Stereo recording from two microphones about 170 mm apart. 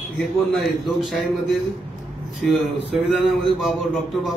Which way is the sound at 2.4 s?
Centre (ahead or behind).